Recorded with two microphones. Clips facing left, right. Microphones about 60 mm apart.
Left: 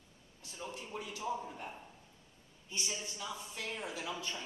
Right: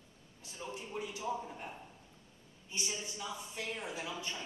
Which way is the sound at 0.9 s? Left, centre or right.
Centre.